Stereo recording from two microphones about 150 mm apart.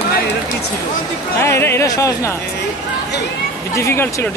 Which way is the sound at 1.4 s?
15° left (ahead or behind).